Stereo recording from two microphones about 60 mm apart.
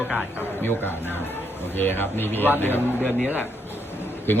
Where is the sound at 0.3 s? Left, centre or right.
Left.